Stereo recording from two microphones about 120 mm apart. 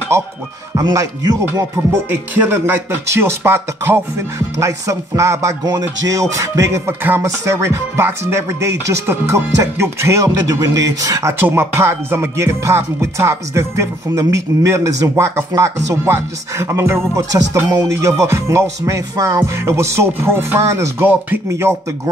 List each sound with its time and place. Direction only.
0.7 s music: 30° right (ahead or behind)
1.9 s music: 15° right (ahead or behind)
11.3 s music: 20° right (ahead or behind)